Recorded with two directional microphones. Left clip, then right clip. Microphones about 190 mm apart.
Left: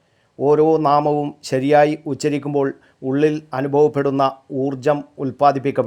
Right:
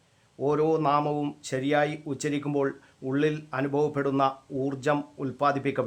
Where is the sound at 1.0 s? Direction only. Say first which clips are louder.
Left 10 dB; 20° left (ahead or behind).